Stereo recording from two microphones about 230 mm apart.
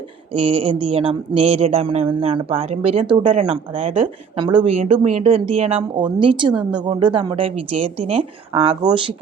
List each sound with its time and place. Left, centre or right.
0.3 s speech: right
6.5 s a woman's voice: centre
6.7 s speech: right